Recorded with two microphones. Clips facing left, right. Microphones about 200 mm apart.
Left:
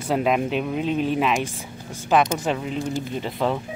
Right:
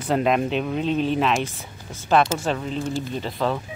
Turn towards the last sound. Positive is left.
turn(degrees=15)  # may be behind; listen again after turning